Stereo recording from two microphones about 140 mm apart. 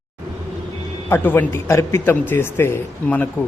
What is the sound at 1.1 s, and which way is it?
A man's voice, 15° left (ahead or behind).